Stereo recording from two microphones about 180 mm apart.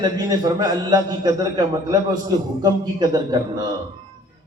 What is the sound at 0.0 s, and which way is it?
A man's voice, 20° right (ahead or behind).